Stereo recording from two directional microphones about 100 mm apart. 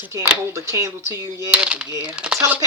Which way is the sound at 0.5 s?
30° right (ahead or behind).